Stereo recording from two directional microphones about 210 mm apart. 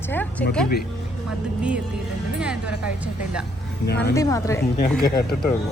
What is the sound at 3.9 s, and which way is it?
Speech, 50° left (ahead or behind).